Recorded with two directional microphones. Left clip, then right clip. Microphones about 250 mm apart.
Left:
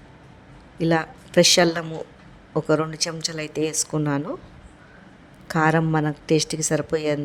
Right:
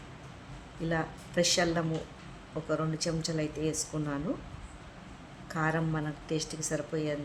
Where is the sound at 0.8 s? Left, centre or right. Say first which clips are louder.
Left 11 dB; left.